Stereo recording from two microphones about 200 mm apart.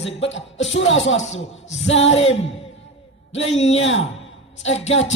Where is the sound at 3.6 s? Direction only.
70° left (ahead or behind).